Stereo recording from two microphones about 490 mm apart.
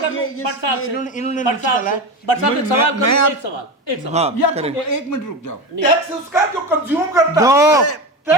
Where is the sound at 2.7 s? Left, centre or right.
Left.